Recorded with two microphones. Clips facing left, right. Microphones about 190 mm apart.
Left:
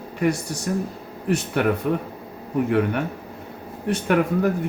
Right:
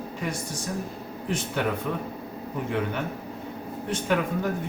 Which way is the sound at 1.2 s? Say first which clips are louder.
Left 6 dB; 65° left (ahead or behind).